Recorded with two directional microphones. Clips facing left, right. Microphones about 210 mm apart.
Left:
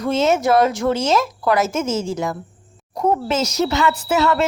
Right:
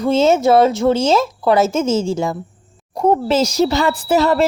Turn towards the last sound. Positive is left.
turn(degrees=-35)  # may be behind; listen again after turning